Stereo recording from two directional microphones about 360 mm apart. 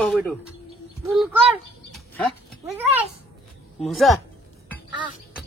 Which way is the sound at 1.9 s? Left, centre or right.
Centre.